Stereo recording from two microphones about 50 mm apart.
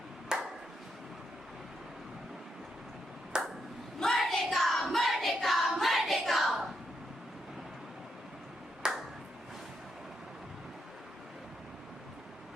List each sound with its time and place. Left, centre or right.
0.3 s ping: centre
3.3 s ping: centre
4.0 s child singing: centre
8.8 s ping: centre